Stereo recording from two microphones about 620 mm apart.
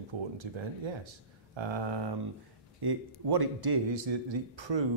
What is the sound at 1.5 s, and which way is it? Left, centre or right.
Speech, right.